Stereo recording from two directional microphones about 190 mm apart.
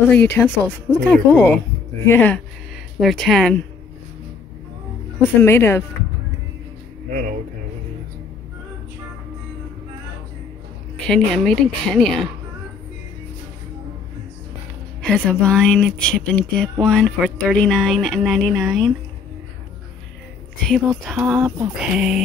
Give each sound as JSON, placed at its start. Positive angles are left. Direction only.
{"t": 0.1, "sound": "speech", "side_deg": 10}
{"t": 5.4, "sound": "speech", "side_deg": 10}
{"t": 7.1, "sound": "speech", "side_deg": -45}
{"t": 11.1, "sound": "speech", "side_deg": 0}
{"t": 15.0, "sound": "speech", "side_deg": 5}
{"t": 20.6, "sound": "speech", "side_deg": 0}